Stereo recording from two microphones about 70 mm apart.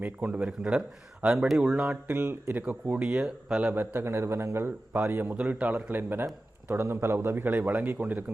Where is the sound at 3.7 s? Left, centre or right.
Right.